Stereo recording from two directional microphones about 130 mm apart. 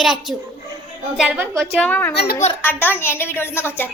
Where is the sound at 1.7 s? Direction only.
10° left (ahead or behind).